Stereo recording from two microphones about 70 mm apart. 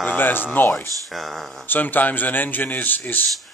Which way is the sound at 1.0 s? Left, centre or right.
Centre.